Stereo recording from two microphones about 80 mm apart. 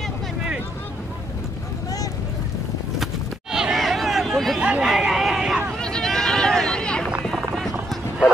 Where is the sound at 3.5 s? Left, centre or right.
Centre.